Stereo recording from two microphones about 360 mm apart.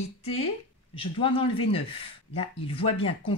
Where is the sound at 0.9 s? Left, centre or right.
Centre.